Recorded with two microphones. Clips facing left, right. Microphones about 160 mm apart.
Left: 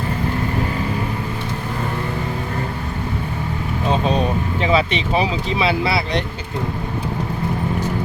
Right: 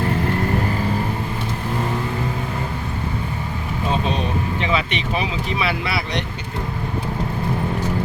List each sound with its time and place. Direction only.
4.6 s speech: 35° left (ahead or behind)